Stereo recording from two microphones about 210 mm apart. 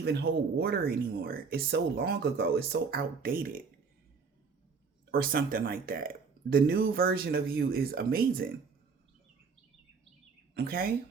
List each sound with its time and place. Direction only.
0.0 s speech: 50° right (ahead or behind)
5.1 s speech: 45° right (ahead or behind)
10.6 s speech: 45° right (ahead or behind)